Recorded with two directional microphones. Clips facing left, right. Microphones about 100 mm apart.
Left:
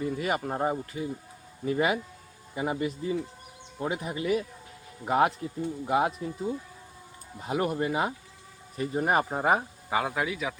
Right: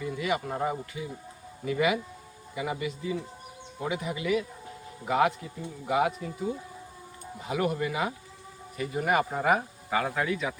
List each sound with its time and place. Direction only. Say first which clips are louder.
0.0 s speech: left 1 dB; 40° left (ahead or behind)
7.4 s speech: left 1 dB; 35° left (ahead or behind)
9.6 s a man's voice: even; 15° left (ahead or behind)